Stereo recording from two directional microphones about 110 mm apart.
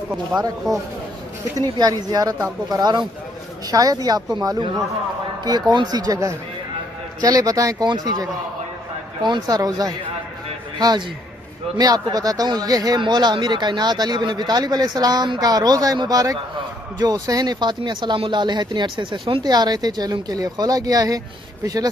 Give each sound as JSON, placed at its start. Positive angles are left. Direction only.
{"t": 1.6, "sound": "speech", "side_deg": -35}
{"t": 19.4, "sound": "speech", "side_deg": -40}